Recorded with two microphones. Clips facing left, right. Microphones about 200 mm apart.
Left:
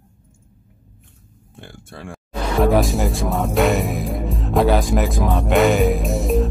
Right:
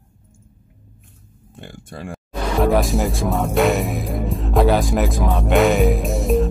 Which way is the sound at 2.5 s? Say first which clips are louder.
Left 1 dB; centre (ahead or behind).